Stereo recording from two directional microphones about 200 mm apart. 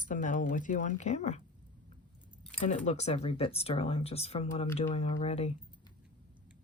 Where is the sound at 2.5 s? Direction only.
35° left (ahead or behind).